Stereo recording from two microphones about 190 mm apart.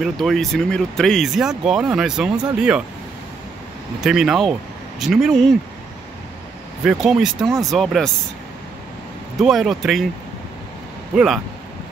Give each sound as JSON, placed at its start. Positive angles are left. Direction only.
{"t": 0.0, "sound": "speech", "side_deg": 0}
{"t": 4.0, "sound": "speech", "side_deg": -5}
{"t": 6.8, "sound": "speech", "side_deg": -5}
{"t": 9.4, "sound": "speech", "side_deg": 0}
{"t": 11.1, "sound": "speech", "side_deg": 0}